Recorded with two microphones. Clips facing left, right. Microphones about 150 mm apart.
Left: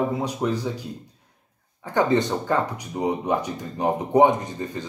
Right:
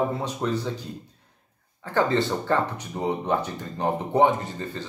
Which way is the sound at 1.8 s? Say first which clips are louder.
Left 2 dB; 15° left (ahead or behind).